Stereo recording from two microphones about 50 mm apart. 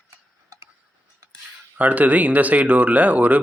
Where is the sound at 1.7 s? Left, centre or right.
Right.